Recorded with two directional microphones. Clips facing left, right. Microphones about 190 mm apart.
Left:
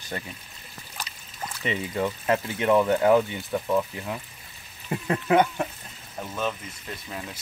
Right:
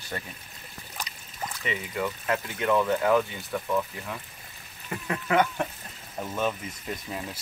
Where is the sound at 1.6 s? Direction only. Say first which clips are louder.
Left 4 dB; 30° left (ahead or behind).